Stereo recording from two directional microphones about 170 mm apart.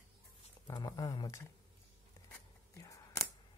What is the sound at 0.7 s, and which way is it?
Speech, 20° left (ahead or behind).